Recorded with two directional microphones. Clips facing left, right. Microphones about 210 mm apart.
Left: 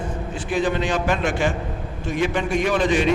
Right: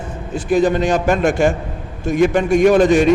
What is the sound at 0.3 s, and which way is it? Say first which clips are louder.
A man's voice: right 8 dB; 45° right (ahead or behind).